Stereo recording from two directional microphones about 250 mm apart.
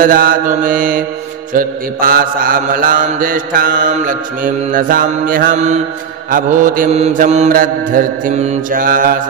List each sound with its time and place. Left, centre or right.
0.0 s mantra: right